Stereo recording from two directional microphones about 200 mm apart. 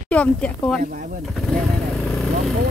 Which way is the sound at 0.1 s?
5° left (ahead or behind).